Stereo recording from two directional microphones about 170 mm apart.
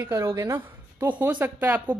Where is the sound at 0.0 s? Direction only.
15° right (ahead or behind).